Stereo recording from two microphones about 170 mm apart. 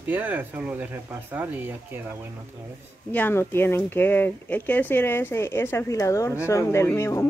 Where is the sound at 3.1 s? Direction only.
10° left (ahead or behind).